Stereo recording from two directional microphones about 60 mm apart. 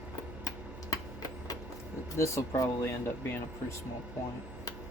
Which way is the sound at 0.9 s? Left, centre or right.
Left.